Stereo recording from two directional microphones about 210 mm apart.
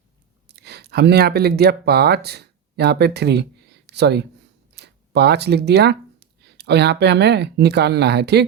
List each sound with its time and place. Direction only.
0.4 s speech: 50° right (ahead or behind)